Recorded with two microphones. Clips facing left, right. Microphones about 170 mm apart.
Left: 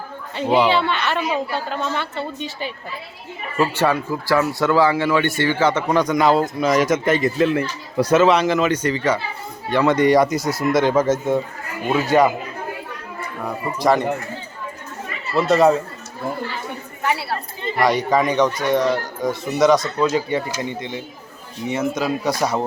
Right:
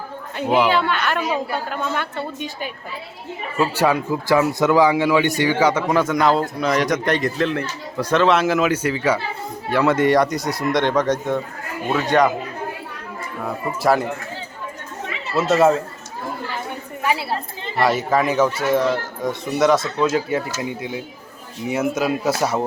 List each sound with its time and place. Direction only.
0.3 s speech: centre (ahead or behind)
3.6 s speech: 10° right (ahead or behind); by 12.3 s 5° left (ahead or behind)
13.4 s speech: 5° right (ahead or behind)
15.4 s speech: 5° right (ahead or behind)
17.0 s a sound: 15° right (ahead or behind)
17.7 s speech: 5° right (ahead or behind)